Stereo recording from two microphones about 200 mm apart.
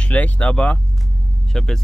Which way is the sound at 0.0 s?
5° left (ahead or behind).